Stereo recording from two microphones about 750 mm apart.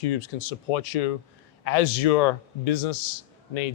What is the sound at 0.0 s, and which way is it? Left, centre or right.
Speech, left.